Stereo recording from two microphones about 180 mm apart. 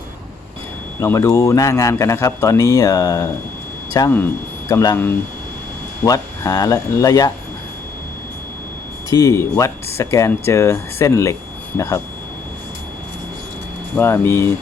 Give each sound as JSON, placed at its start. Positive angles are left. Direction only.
{"t": 0.9, "sound": "a man's voice", "side_deg": 15}
{"t": 6.1, "sound": "speech", "side_deg": 20}
{"t": 9.0, "sound": "a man's voice", "side_deg": 20}
{"t": 13.9, "sound": "a man's voice", "side_deg": 15}